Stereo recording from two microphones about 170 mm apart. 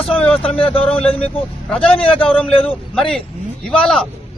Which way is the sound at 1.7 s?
5° left (ahead or behind).